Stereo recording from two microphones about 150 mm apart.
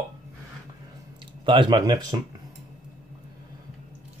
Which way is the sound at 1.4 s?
30° right (ahead or behind).